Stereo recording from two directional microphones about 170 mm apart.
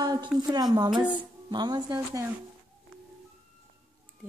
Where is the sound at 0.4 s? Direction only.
25° right (ahead or behind).